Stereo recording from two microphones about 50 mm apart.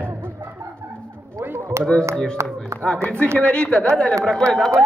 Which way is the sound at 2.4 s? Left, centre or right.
Right.